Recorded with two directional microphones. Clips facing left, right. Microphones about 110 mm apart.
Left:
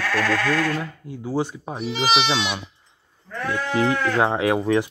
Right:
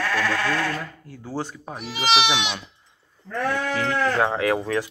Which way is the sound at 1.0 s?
15° left (ahead or behind).